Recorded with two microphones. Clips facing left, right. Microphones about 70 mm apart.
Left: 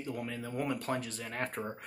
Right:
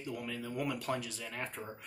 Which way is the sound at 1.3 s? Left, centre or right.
Left.